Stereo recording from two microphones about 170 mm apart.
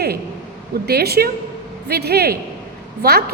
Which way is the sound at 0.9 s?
70° right (ahead or behind).